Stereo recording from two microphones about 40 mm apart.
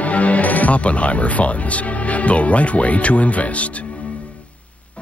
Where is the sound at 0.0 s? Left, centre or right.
Left.